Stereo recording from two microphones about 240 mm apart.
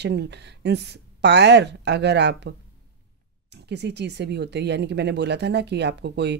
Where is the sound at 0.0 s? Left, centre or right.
Right.